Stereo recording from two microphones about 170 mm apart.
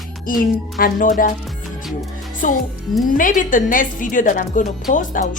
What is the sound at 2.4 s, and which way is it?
Speech, 50° left (ahead or behind).